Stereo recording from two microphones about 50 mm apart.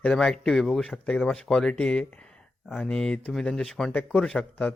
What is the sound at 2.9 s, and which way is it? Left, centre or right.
A man's voice, centre.